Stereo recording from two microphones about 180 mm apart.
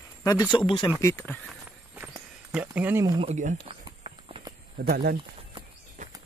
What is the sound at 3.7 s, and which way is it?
Run, 30° right (ahead or behind).